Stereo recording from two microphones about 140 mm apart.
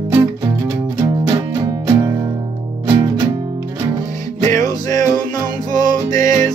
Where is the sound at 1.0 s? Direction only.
25° right (ahead or behind).